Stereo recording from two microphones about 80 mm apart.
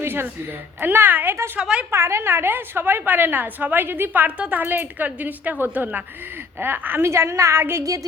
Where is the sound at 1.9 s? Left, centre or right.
Right.